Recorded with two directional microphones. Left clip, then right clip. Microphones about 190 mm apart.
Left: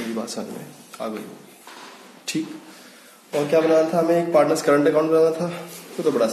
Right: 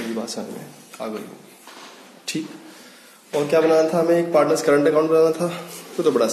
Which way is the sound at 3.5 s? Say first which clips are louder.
Right 1 dB; 15° right (ahead or behind).